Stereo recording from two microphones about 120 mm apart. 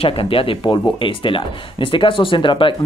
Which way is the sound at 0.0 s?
50° left (ahead or behind).